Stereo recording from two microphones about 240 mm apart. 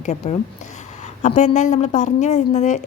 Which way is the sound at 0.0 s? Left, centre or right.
Left.